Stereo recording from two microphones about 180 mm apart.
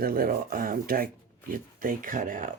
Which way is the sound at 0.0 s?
55° right (ahead or behind).